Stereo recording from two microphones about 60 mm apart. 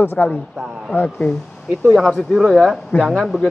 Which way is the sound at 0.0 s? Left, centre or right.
Left.